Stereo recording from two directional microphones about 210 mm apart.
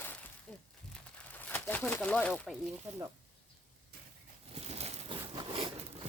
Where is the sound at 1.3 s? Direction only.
10° left (ahead or behind).